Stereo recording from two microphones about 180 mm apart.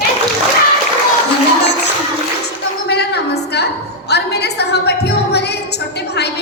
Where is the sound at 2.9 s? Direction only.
65° left (ahead or behind).